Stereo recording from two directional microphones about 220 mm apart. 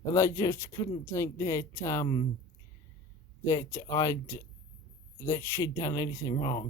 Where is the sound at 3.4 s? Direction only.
15° left (ahead or behind).